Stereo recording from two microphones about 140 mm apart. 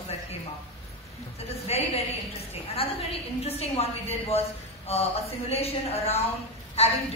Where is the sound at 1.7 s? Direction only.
45° left (ahead or behind).